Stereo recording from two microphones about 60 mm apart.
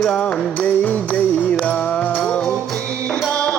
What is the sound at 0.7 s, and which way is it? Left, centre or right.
Music, left.